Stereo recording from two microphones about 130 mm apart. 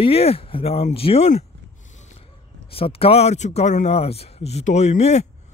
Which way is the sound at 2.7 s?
45° left (ahead or behind).